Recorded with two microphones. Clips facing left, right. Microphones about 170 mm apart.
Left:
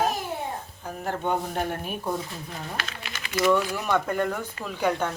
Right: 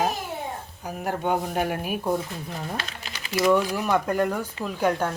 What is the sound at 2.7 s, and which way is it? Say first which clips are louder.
Speech: right 1 dB; 35° right (ahead or behind).